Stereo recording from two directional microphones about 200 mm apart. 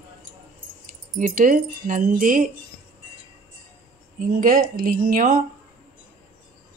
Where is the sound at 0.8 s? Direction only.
40° right (ahead or behind).